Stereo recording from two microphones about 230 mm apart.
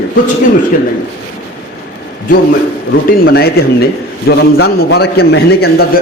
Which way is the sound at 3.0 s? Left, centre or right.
Left.